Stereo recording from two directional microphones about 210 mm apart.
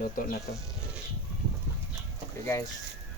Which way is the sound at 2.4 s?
15° left (ahead or behind).